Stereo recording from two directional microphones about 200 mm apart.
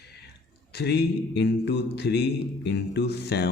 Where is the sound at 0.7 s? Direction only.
55° left (ahead or behind).